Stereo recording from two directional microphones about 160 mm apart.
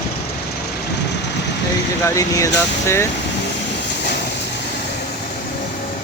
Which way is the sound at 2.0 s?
20° left (ahead or behind).